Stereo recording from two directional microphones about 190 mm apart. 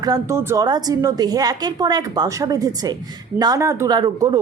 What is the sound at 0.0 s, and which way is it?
A woman's voice, 15° right (ahead or behind).